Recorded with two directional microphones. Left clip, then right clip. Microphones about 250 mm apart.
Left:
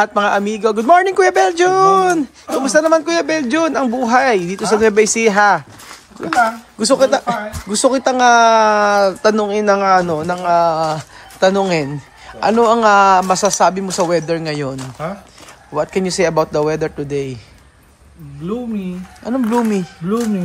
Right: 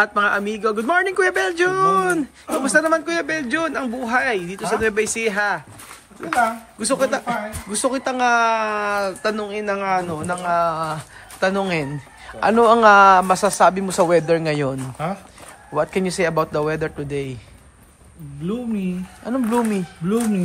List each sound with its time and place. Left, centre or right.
0.0 s speech: centre
19.2 s speech: centre